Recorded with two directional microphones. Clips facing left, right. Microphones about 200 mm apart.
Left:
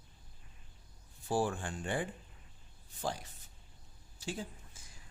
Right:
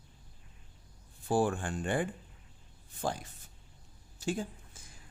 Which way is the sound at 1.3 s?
55° right (ahead or behind).